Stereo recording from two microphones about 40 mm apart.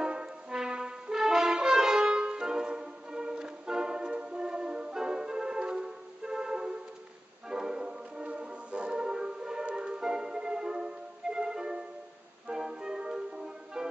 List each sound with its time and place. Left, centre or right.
0.0 s brass instrument: centre
7.4 s music: centre